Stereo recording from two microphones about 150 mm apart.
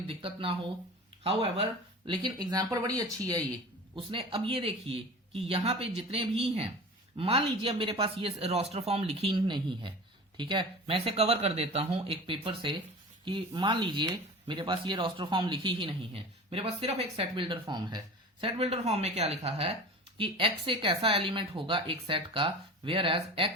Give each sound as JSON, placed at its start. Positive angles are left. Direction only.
{"t": 0.2, "sound": "speech", "side_deg": -35}
{"t": 2.0, "sound": "speech", "side_deg": -30}
{"t": 3.9, "sound": "speech", "side_deg": -35}